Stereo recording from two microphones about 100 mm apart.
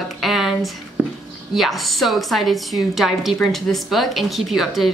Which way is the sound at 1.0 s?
20° right (ahead or behind).